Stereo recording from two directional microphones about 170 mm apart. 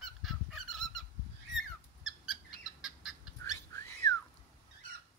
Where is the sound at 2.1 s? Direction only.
5° right (ahead or behind).